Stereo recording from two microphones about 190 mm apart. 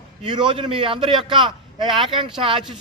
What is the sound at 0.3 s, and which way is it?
A man's voice, 25° right (ahead or behind).